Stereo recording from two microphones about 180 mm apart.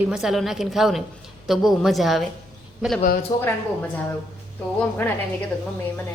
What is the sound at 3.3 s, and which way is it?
Speech, 25° left (ahead or behind).